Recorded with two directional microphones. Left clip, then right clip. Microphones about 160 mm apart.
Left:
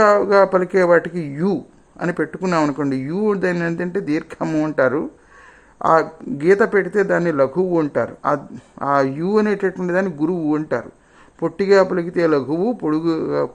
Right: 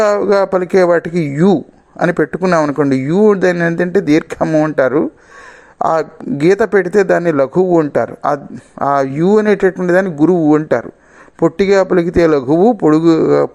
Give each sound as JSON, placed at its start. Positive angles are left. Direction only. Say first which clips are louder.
{"t": 0.3, "sound": "speech", "louder": "right 2 dB", "side_deg": -30}
{"t": 2.6, "sound": "speech", "louder": "right 4 dB", "side_deg": -20}
{"t": 2.9, "sound": "speech", "louder": "right 9 dB", "side_deg": -30}
{"t": 4.4, "sound": "speech", "louder": "right 8 dB", "side_deg": -15}
{"t": 4.8, "sound": "speech", "louder": "right 5 dB", "side_deg": -25}